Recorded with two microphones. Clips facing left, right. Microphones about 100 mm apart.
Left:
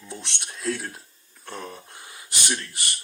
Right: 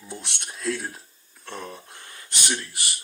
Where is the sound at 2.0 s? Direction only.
10° left (ahead or behind).